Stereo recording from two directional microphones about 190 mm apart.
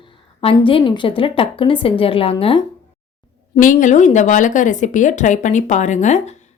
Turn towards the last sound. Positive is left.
turn(degrees=40)  # may be behind; listen again after turning